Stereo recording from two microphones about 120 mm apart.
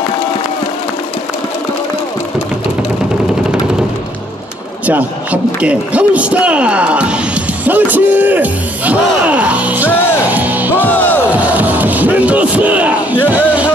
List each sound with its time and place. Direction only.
4.8 s a man's voice: 10° right (ahead or behind)
9.8 s music: 20° left (ahead or behind)
10.2 s music: 15° right (ahead or behind)
10.9 s music: 15° left (ahead or behind)
11.3 s crowd: 15° right (ahead or behind)